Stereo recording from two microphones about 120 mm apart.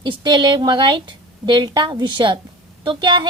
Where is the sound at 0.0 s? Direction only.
40° right (ahead or behind).